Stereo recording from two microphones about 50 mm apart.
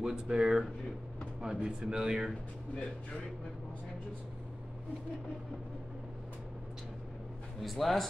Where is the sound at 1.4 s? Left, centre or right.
Centre.